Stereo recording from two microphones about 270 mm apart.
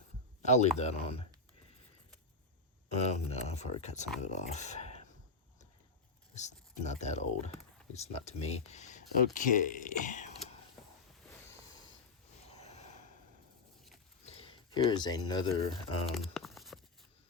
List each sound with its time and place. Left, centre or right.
0.4 s speech: left
3.0 s speech: left
6.3 s speech: left
12.5 s a sound: left
14.3 s speech: left
16.1 s crumpling: centre